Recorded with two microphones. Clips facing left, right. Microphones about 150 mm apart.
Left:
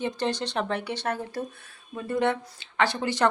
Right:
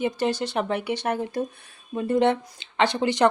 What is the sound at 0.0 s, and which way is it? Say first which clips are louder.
Speech: right 4 dB; 10° right (ahead or behind).